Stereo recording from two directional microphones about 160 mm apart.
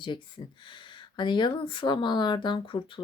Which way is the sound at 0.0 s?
30° left (ahead or behind).